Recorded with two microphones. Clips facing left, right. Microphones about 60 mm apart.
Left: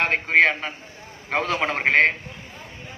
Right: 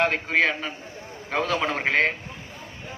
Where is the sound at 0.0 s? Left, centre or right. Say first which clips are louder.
Left 3 dB; left.